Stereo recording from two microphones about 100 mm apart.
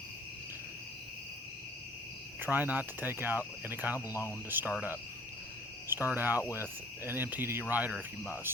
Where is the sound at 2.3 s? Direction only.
20° right (ahead or behind).